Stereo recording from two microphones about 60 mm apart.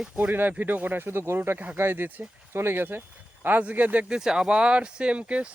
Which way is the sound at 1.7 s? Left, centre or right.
Right.